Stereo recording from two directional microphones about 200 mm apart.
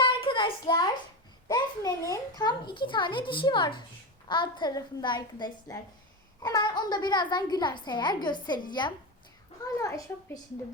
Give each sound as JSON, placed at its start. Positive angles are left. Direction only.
{"t": 0.0, "sound": "child singing", "side_deg": 25}
{"t": 1.5, "sound": "a child's voice", "side_deg": 20}